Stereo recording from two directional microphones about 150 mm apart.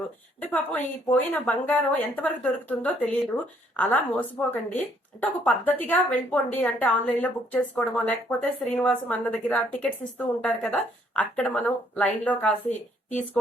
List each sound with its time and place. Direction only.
0.3 s a woman's voice: 10° left (ahead or behind)
12.6 s a woman's voice: 55° left (ahead or behind)